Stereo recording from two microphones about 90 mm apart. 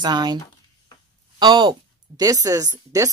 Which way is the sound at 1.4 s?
60° right (ahead or behind).